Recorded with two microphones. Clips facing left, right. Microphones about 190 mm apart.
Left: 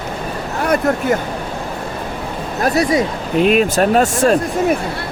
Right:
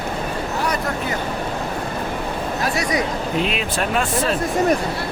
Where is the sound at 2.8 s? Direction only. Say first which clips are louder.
Left 8 dB; 30° left (ahead or behind).